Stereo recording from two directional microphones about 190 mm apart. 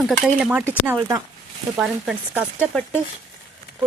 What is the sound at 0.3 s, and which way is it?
Speech, 5° right (ahead or behind).